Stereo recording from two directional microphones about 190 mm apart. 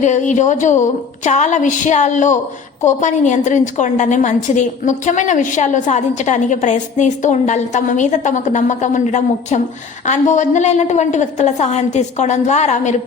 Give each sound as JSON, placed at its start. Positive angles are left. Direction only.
{"t": 0.0, "sound": "a woman's voice", "side_deg": 40}